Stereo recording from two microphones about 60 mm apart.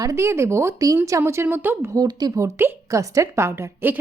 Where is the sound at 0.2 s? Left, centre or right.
Right.